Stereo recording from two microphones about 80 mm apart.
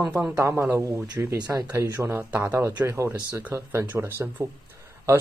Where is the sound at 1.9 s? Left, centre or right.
Right.